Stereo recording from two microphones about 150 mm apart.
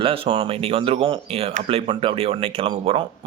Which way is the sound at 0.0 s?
35° right (ahead or behind).